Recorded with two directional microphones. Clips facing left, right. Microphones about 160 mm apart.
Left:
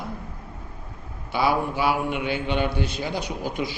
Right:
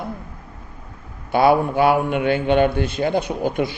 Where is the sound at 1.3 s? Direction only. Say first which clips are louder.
Right 7 dB; 55° right (ahead or behind).